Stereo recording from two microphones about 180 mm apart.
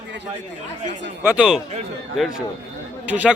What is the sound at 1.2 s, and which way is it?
Speech, 10° right (ahead or behind).